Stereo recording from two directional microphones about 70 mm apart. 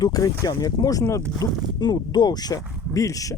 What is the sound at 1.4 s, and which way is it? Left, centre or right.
Speech, left.